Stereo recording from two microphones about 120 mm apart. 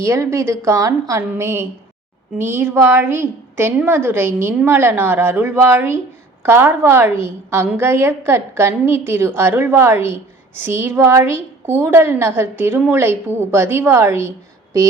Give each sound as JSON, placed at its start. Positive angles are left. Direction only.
{"t": 0.0, "sound": "a woman's voice", "side_deg": -25}